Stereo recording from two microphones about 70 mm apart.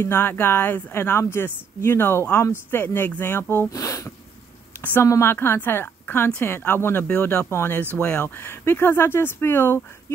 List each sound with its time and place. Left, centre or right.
0.0 s speech: left
3.7 s speech: left
5.2 s speech: left
7.9 s speech: centre
8.2 s speech: left